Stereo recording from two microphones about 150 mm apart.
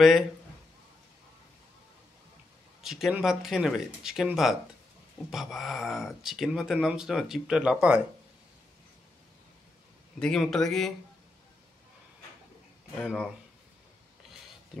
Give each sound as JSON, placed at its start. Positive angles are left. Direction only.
{"t": 2.8, "sound": "speech", "side_deg": -5}
{"t": 10.1, "sound": "speech", "side_deg": 5}
{"t": 12.9, "sound": "speech", "side_deg": 5}